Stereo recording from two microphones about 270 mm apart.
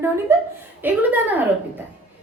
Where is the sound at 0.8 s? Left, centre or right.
Centre.